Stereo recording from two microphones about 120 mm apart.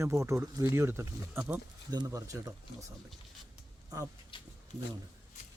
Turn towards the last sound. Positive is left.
turn(degrees=70)  # may be behind; listen again after turning